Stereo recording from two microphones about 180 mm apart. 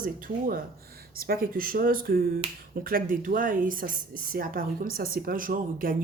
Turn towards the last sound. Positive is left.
turn(degrees=-50)  # may be behind; listen again after turning